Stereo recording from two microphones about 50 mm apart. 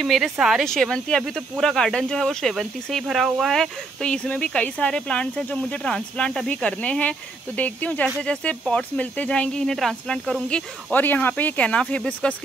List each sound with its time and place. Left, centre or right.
0.2 s speech: centre
0.7 s speech: centre
3.5 s speech: centre
4.1 s speech: left
8.2 s speech: left
11.0 s speech: left